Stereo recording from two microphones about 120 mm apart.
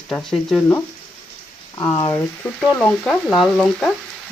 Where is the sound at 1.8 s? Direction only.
30° left (ahead or behind).